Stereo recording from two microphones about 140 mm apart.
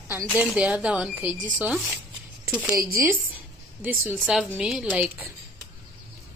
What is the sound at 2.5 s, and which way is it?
Speech, 10° right (ahead or behind).